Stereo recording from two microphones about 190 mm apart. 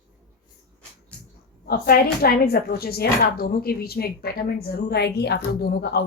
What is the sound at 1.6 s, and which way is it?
Speech, 55° left (ahead or behind).